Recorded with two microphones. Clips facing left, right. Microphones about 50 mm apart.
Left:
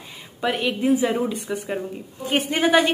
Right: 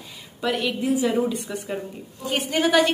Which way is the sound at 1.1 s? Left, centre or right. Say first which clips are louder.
Even; centre.